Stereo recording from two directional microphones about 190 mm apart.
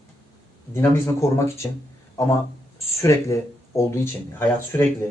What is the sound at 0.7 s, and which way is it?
Speech, 15° left (ahead or behind).